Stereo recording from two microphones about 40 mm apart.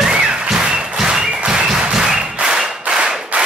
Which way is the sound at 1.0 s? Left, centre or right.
Centre.